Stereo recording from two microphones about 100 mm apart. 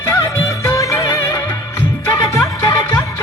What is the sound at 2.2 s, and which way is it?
Music, 35° left (ahead or behind).